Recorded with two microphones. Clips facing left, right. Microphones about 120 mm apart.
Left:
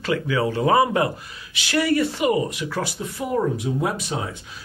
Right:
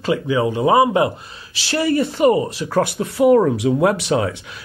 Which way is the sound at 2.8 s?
65° right (ahead or behind).